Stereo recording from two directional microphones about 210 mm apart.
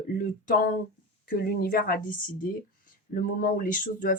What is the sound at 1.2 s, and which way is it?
Speech, 45° left (ahead or behind).